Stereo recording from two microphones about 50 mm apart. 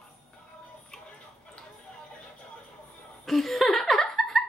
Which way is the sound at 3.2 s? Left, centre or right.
Centre.